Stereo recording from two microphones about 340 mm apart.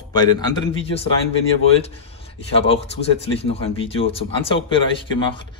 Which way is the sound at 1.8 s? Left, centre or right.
Centre.